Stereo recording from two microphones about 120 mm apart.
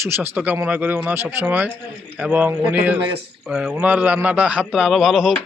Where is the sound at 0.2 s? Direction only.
10° right (ahead or behind).